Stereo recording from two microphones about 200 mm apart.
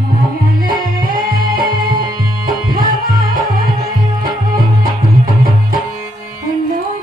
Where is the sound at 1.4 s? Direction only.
20° right (ahead or behind).